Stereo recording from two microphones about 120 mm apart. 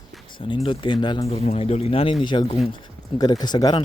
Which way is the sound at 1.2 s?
60° left (ahead or behind).